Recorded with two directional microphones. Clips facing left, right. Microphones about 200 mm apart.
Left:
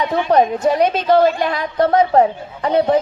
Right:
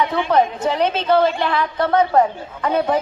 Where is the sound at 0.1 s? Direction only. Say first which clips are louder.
Left 3 dB; 40° left (ahead or behind).